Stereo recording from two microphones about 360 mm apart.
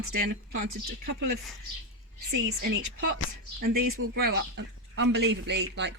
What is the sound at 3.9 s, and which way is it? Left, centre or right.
Speech, right.